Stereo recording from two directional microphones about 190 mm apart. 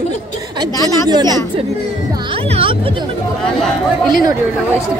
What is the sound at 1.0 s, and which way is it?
Speech, 20° right (ahead or behind).